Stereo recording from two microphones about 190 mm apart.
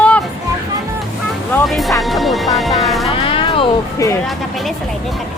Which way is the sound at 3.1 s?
30° left (ahead or behind).